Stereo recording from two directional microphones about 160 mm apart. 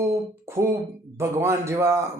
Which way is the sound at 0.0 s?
15° right (ahead or behind).